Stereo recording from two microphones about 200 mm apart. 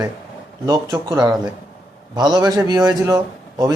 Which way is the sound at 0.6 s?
20° right (ahead or behind).